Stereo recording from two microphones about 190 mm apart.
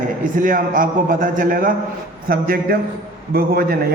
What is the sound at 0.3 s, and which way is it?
A man's voice, 45° right (ahead or behind).